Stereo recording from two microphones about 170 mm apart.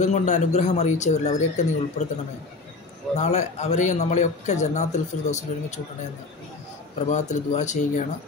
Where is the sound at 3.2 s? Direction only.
45° left (ahead or behind).